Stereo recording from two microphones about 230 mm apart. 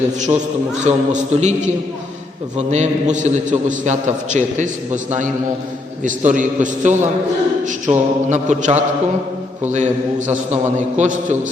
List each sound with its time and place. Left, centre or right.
0.9 s a man's voice: right